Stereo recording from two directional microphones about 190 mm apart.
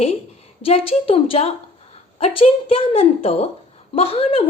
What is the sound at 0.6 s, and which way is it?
A woman's voice, 30° left (ahead or behind).